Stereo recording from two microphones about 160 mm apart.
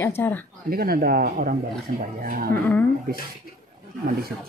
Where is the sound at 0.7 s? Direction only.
70° right (ahead or behind).